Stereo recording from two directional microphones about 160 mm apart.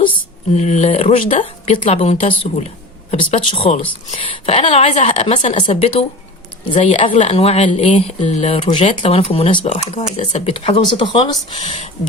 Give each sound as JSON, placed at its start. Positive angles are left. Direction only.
{"t": 0.5, "sound": "speech", "side_deg": 45}
{"t": 1.8, "sound": "speech", "side_deg": 40}
{"t": 11.6, "sound": "speech", "side_deg": 45}